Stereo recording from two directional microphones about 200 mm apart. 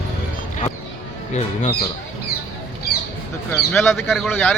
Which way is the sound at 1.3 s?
35° left (ahead or behind).